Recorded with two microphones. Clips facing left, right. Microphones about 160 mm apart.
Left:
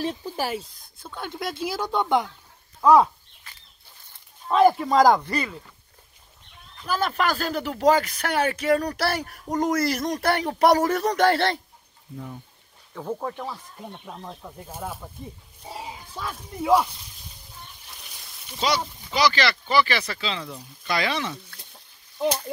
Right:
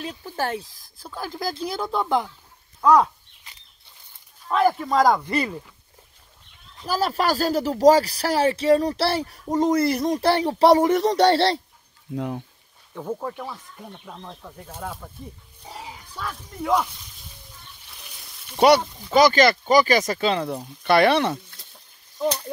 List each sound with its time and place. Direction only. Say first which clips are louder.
0.2 s speech: right 1 dB; 10° left (ahead or behind)
0.6 s speech: even; centre (ahead or behind)
4.5 s speech: left 3 dB; 20° left (ahead or behind)
4.8 s speech: left 1 dB; centre (ahead or behind)
6.8 s speech: right 2 dB; 35° right (ahead or behind)
12.2 s speech: right 9 dB; 90° right
13.1 s speech: even; centre (ahead or behind)
18.6 s speech: right 10 dB; 60° right (ahead or behind)
19.1 s speech: right 6 dB; 50° right (ahead or behind)